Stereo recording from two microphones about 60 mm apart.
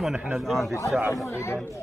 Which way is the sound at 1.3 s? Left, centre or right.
Left.